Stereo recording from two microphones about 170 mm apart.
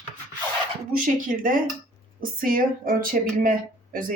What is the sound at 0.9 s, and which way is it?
Speech, 50° right (ahead or behind).